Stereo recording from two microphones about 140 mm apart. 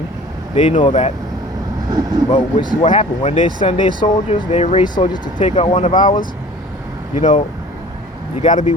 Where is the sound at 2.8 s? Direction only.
55° left (ahead or behind); by 4.1 s 35° left (ahead or behind).